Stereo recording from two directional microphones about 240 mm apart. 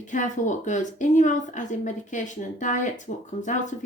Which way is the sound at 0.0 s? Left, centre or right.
Left.